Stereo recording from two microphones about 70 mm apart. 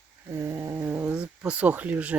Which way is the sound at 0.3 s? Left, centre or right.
Right.